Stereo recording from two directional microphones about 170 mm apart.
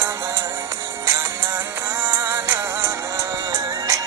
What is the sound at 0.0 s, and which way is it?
Music, 15° right (ahead or behind).